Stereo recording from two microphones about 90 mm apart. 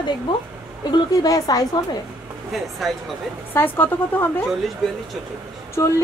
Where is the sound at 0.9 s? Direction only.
45° left (ahead or behind).